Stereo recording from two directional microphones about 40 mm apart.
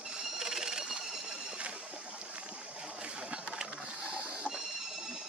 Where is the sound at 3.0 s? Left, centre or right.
Right.